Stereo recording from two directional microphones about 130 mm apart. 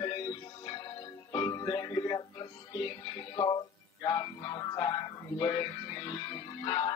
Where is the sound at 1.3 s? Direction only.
30° left (ahead or behind).